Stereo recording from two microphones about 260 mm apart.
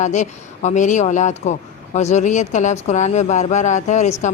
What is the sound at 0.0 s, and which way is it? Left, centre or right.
Speech, left.